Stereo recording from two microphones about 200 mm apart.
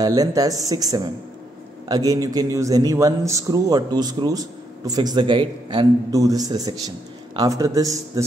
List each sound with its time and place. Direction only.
0.0 s a man's voice: 20° right (ahead or behind)